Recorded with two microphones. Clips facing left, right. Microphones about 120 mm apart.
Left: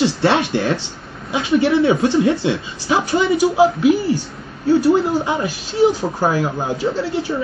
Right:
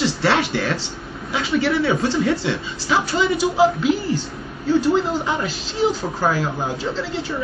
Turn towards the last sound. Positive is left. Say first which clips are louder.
# left 5 dB
turn(degrees=15)  # may be behind; listen again after turning